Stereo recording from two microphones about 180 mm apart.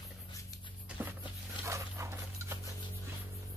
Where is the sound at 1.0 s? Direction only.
15° right (ahead or behind).